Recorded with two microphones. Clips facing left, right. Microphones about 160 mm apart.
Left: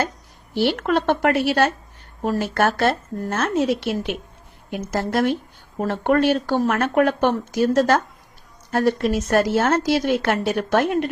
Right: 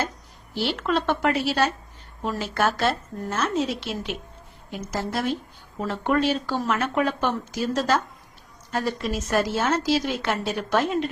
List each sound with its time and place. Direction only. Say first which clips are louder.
0.5 s speech: left 5 dB; 55° left (ahead or behind)